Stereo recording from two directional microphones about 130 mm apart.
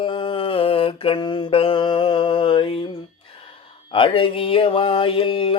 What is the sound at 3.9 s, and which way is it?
Speech, 45° left (ahead or behind).